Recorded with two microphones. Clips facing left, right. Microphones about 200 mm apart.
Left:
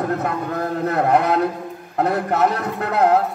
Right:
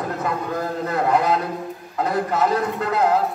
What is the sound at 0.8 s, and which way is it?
A man's voice, 60° left (ahead or behind).